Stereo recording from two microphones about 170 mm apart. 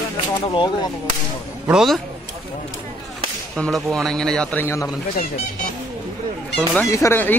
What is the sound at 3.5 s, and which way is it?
A man's voice, 5° left (ahead or behind).